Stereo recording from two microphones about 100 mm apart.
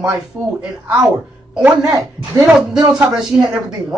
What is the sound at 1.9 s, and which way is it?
Speech, 35° right (ahead or behind).